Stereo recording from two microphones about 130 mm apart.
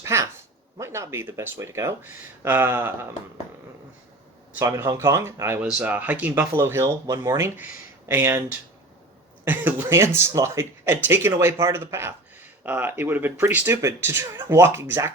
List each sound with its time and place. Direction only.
0.0 s a sound: 20° right (ahead or behind)
0.8 s speech: 20° right (ahead or behind)
4.5 s speech: 20° right (ahead or behind)